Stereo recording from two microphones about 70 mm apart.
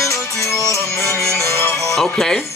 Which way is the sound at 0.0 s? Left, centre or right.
Left.